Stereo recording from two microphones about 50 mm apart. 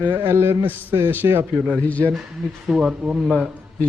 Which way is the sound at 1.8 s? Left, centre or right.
Left.